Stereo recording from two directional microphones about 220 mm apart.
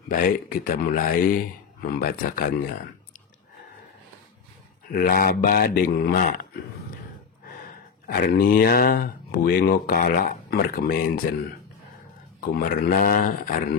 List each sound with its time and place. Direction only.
0.1 s speech: 40° left (ahead or behind)
4.9 s speech: 45° left (ahead or behind)
8.1 s speech: 40° left (ahead or behind)
12.5 s speech: 40° left (ahead or behind)